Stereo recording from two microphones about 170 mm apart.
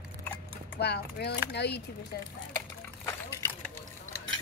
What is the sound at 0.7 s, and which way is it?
Speech, 75° left (ahead or behind).